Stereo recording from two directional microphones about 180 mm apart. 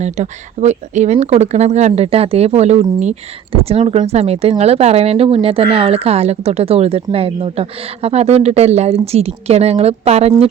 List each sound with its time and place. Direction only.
0.0 s speech: 40° right (ahead or behind)